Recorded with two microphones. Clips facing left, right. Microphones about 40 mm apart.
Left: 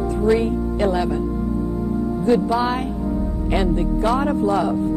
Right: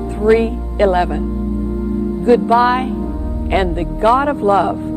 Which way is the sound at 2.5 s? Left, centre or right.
Right.